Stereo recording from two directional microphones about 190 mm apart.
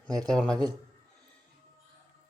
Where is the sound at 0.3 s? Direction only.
5° left (ahead or behind).